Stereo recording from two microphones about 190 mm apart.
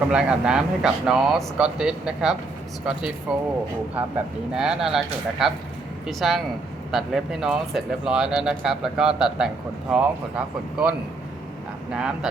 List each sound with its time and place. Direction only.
0.1 s speech: 5° right (ahead or behind)
4.5 s speech: 5° right (ahead or behind)